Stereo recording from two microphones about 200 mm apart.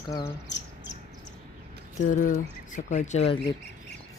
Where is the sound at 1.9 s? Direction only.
40° left (ahead or behind).